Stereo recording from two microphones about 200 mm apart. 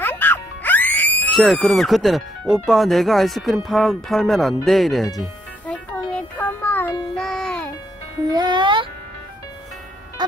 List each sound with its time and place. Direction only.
0.0 s music: 10° left (ahead or behind)
8.3 s music: 20° right (ahead or behind)